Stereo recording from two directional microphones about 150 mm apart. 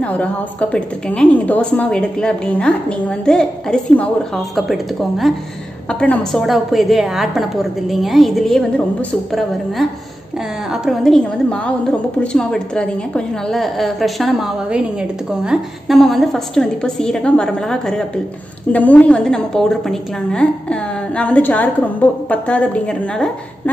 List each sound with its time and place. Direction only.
0.0 s a woman's voice: 10° left (ahead or behind)
10.7 s a woman's voice: centre (ahead or behind)